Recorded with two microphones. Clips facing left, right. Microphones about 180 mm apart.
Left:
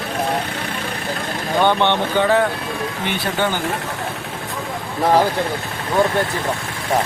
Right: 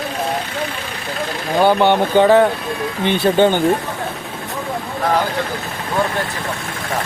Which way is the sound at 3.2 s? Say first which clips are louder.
Right 9 dB; 25° right (ahead or behind).